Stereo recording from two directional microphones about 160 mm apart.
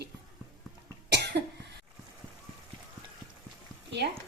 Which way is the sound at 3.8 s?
90° right.